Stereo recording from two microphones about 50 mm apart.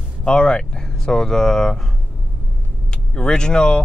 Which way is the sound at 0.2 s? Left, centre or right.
Centre.